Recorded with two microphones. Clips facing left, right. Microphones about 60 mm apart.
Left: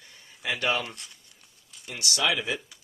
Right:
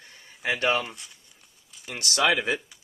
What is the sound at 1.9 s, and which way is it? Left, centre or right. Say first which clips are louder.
Speech: right 4 dB; right.